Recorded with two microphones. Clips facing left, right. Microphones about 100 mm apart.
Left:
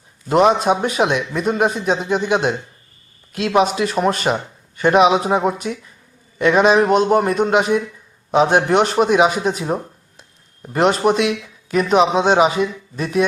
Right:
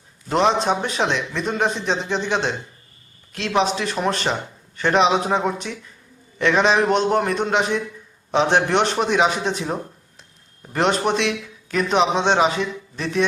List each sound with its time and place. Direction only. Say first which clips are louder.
0.3 s a man's voice: left 4 dB; 10° left (ahead or behind)